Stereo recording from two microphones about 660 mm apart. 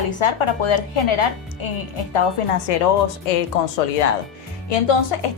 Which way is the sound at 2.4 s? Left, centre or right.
Left.